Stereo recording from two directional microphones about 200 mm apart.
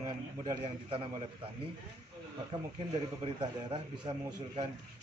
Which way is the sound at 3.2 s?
25° right (ahead or behind).